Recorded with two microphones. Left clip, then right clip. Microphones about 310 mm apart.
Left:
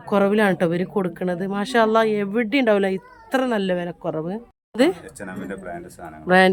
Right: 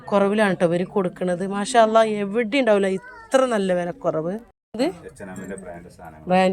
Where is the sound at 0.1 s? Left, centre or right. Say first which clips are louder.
Left 1 dB; centre.